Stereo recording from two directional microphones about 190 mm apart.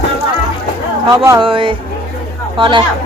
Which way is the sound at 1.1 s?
20° right (ahead or behind).